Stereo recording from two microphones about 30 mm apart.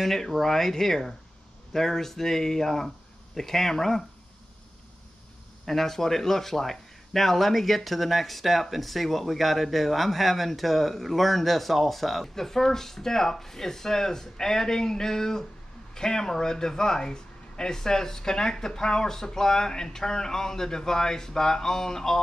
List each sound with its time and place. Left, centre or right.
0.0 s speech: centre
5.7 s speech: centre
12.4 s speech: centre